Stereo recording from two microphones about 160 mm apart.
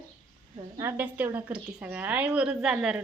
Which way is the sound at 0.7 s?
15° right (ahead or behind).